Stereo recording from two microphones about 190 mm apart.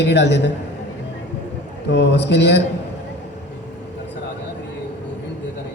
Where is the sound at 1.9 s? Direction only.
65° left (ahead or behind).